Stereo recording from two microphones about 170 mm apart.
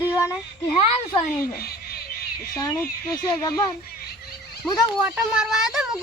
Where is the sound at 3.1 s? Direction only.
25° left (ahead or behind).